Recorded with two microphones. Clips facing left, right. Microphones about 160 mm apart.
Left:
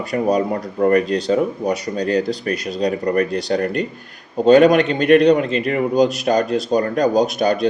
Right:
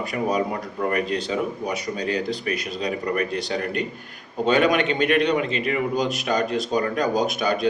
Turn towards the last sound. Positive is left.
turn(degrees=40)  # may be behind; listen again after turning